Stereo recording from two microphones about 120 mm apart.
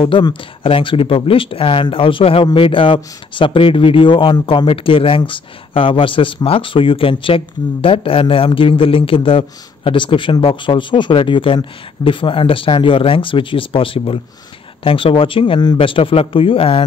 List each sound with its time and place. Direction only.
0.0 s speech: 45° left (ahead or behind)